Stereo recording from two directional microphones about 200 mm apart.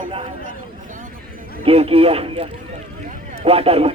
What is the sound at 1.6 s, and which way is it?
Speech, 30° right (ahead or behind).